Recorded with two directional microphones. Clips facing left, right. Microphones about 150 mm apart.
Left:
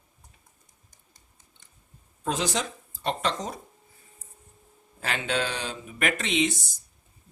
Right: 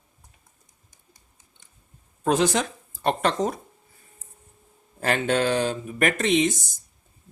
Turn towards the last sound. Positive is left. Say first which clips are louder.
# right 5 dB
turn(degrees=-45)  # may be behind; listen again after turning